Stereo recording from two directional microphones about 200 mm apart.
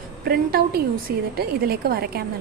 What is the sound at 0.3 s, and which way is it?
A woman's voice, 50° right (ahead or behind).